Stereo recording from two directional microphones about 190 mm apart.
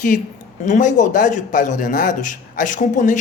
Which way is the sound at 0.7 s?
40° left (ahead or behind).